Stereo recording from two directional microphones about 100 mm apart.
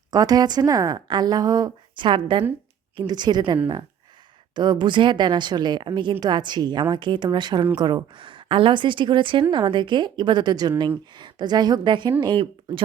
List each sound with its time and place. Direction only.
0.1 s a woman's voice: 40° right (ahead or behind); by 12.8 s 60° right (ahead or behind)